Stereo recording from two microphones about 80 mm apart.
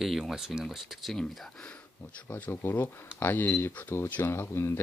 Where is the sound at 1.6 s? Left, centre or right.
Centre.